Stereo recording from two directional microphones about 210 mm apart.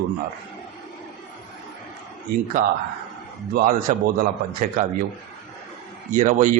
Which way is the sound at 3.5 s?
40° right (ahead or behind).